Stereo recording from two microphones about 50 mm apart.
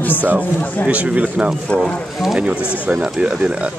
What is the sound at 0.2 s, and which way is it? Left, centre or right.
Speech, right.